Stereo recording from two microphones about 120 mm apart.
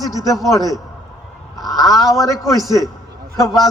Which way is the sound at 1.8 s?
30° left (ahead or behind).